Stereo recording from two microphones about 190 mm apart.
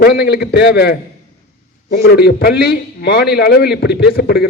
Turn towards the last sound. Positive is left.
turn(degrees=55)  # may be behind; listen again after turning